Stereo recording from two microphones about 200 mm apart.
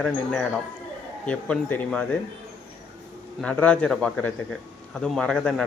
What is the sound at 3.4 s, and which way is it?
Speech, 5° left (ahead or behind).